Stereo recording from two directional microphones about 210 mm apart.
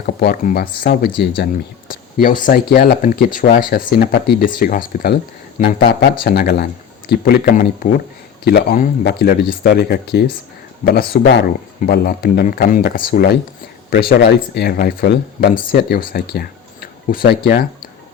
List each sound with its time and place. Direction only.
0.0 s speech: 45° left (ahead or behind)